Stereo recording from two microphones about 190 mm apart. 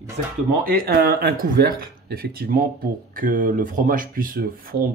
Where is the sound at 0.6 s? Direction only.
50° right (ahead or behind).